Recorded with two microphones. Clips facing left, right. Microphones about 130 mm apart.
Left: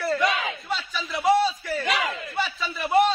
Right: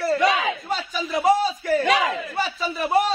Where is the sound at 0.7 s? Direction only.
45° right (ahead or behind).